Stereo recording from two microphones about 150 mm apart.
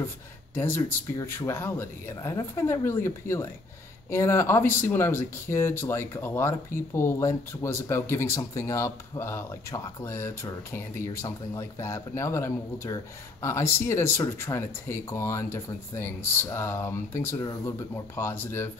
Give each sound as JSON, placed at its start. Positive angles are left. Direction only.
{"t": 0.6, "sound": "speech", "side_deg": 15}